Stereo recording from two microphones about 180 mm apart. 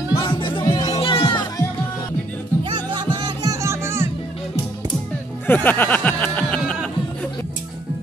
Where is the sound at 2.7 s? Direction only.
25° right (ahead or behind).